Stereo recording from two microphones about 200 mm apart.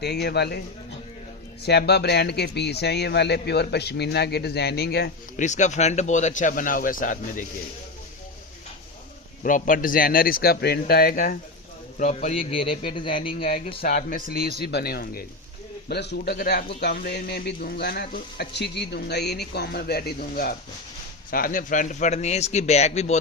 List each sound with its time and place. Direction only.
0.0 s a man's voice: 55° left (ahead or behind)
1.6 s a man's voice: 55° left (ahead or behind)
5.4 s a man's voice: 35° left (ahead or behind)
9.4 s speech: 40° left (ahead or behind)
11.9 s a man's voice: 35° left (ahead or behind)
13.2 s a man's voice: 45° left (ahead or behind)